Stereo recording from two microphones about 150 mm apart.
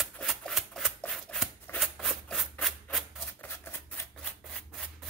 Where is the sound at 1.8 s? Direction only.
Centre (ahead or behind).